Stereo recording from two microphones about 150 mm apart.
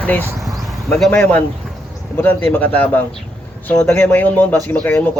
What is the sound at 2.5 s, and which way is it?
Speech, 10° left (ahead or behind).